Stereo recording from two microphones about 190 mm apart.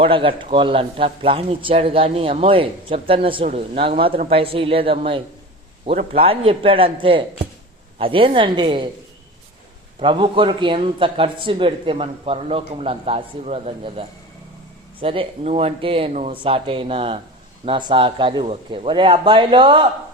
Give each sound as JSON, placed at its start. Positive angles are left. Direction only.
{"t": 0.0, "sound": "speech", "side_deg": -30}
{"t": 10.0, "sound": "speech", "side_deg": -25}
{"t": 15.0, "sound": "speech", "side_deg": -30}